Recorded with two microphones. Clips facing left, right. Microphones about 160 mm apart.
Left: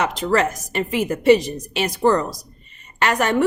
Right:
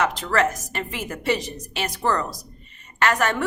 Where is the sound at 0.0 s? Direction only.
15° left (ahead or behind).